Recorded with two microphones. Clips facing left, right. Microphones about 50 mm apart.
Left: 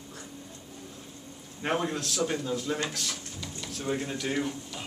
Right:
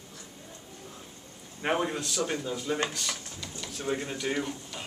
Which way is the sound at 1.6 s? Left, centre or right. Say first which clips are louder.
Right 1 dB; centre.